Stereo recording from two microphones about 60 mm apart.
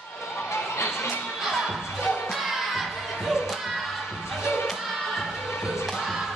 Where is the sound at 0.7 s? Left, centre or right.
Left.